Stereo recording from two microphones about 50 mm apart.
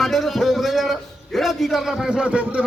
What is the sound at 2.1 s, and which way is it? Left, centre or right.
Speech, right.